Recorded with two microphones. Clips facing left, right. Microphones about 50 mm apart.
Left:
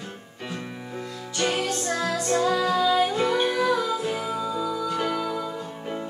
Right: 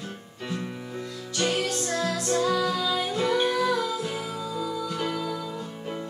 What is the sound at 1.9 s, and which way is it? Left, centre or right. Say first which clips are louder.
Music: left 2 dB; centre.